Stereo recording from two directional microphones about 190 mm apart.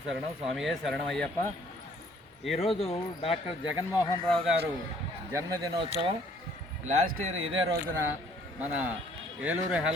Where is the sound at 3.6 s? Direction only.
20° left (ahead or behind).